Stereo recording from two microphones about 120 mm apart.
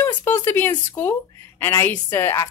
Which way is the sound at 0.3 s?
20° left (ahead or behind).